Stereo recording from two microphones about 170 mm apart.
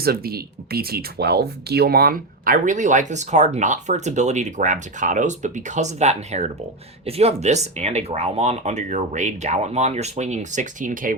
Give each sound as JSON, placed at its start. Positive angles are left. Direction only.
{"t": 0.0, "sound": "speech", "side_deg": -65}